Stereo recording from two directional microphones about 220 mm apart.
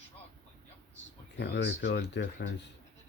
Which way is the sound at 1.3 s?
50° left (ahead or behind).